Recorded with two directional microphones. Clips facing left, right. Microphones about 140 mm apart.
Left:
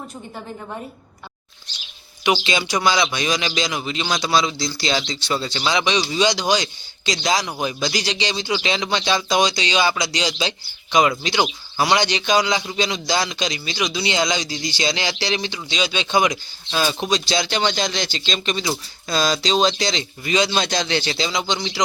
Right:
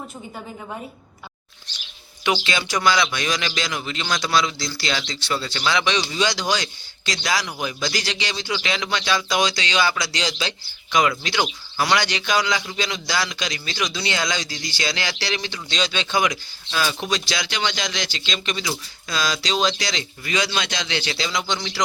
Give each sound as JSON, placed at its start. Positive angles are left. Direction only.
{"t": 0.3, "sound": "a woman's voice", "side_deg": 0}
{"t": 2.2, "sound": "speech", "side_deg": 20}